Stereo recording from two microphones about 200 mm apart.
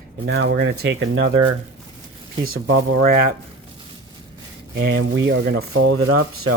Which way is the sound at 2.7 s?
70° right (ahead or behind).